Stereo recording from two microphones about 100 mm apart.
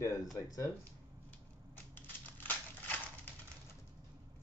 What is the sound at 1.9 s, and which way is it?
Scissors, 20° left (ahead or behind).